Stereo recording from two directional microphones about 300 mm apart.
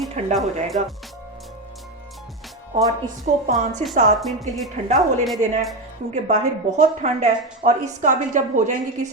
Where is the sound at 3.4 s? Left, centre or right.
Right.